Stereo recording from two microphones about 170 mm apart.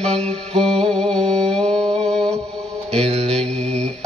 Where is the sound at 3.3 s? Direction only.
5° left (ahead or behind).